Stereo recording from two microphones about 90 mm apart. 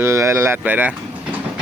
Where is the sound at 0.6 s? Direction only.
20° right (ahead or behind).